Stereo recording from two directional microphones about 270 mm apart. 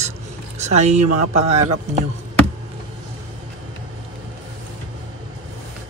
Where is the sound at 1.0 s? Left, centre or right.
Right.